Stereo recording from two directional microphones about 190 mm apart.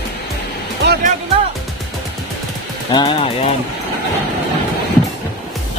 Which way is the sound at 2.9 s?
30° left (ahead or behind).